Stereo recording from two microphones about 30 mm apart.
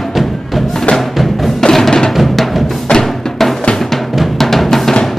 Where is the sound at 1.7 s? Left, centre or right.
Centre.